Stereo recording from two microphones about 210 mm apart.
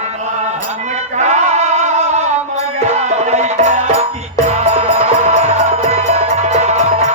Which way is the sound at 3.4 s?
35° right (ahead or behind).